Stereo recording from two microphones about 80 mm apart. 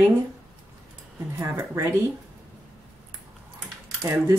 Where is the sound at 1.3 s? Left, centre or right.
Right.